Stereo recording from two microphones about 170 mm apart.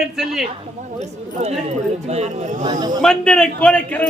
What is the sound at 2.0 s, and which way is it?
Speech, 40° right (ahead or behind).